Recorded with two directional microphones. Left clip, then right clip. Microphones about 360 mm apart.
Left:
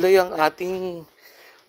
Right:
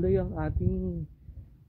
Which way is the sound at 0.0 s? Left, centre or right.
Centre.